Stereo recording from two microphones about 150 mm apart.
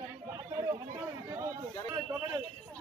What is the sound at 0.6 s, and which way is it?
Chatter, 25° right (ahead or behind).